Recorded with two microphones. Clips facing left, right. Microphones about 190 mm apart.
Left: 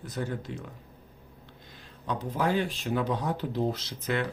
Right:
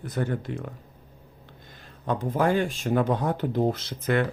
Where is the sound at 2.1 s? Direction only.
50° right (ahead or behind).